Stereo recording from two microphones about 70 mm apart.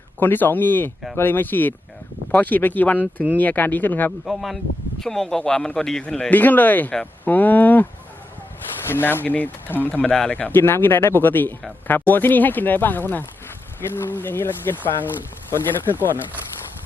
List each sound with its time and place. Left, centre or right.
0.2 s speech: left
4.3 s speech: centre
6.3 s speech: left
8.9 s speech: left
10.0 s speech: centre
10.5 s speech: left